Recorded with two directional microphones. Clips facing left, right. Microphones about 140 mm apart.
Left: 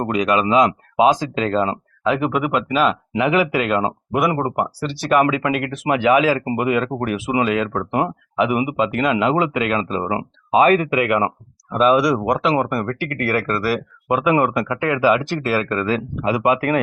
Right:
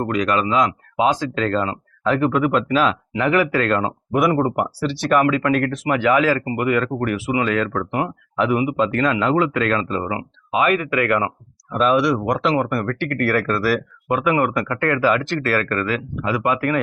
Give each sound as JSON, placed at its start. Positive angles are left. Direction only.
{"t": 0.0, "sound": "speech", "side_deg": 15}
{"t": 5.2, "sound": "speech", "side_deg": 20}
{"t": 14.1, "sound": "speech", "side_deg": 20}